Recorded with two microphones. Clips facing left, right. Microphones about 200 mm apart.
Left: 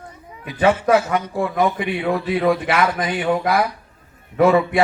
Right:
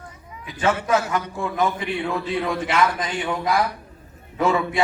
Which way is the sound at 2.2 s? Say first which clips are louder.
Left 6 dB; 60° left (ahead or behind).